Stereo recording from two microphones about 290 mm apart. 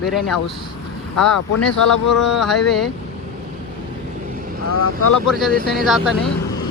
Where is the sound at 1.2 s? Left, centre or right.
Left.